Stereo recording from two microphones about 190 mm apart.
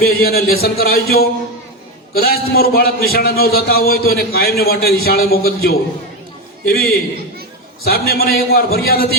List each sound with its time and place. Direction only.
0.0 s a man's voice: 55° left (ahead or behind)